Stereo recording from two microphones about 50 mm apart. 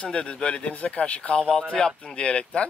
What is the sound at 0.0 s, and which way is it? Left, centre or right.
Speech, left.